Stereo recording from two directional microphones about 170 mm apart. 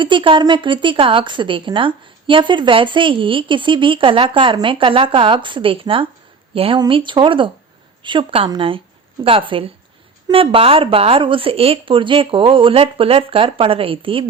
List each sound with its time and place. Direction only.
0.0 s a woman's voice: 30° right (ahead or behind)